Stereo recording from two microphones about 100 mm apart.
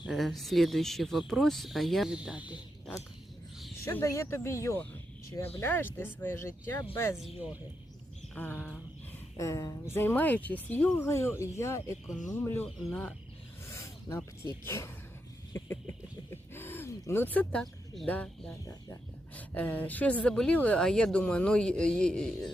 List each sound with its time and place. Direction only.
0.0 s speech: centre (ahead or behind)
3.8 s speech: 25° left (ahead or behind)
8.4 s a man's voice: 20° left (ahead or behind)
9.4 s speech: 30° left (ahead or behind); by 10.8 s 15° left (ahead or behind)
10.9 s a man's voice: 25° left (ahead or behind)
13.7 s snake: 30° left (ahead or behind)
14.6 s speech: 25° left (ahead or behind)
15.5 s a sound: 25° left (ahead or behind)
17.6 s a sound: 5° left (ahead or behind)
18.1 s a man's voice: 15° left (ahead or behind)